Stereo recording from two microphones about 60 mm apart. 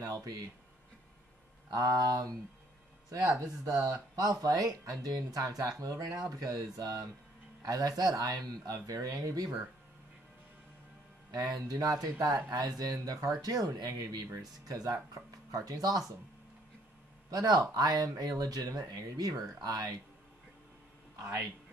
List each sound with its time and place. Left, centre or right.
0.0 s a sound: right
1.7 s speech: right
3.1 s speech: right
4.1 s speech: right
11.3 s speech: right
17.3 s speech: right
21.2 s a man's voice: right